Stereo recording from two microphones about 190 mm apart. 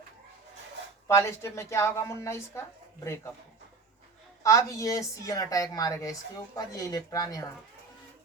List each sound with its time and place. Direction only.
1.0 s a woman's voice: 15° left (ahead or behind)
4.4 s a woman's voice: 15° left (ahead or behind)